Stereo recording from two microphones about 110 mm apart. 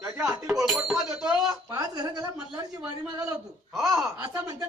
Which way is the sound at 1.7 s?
35° right (ahead or behind).